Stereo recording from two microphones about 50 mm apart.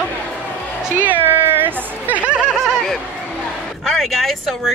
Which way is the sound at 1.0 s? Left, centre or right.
Right.